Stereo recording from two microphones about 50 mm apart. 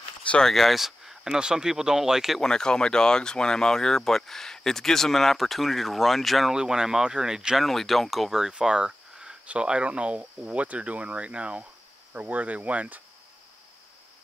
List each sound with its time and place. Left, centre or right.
0.4 s speech: centre
2.4 s speech: centre
6.5 s speech: centre
7.6 s speech: centre
8.4 s speech: centre; by 13.0 s right